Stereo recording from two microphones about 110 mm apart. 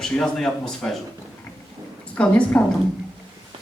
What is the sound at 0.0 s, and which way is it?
Speech, 5° left (ahead or behind).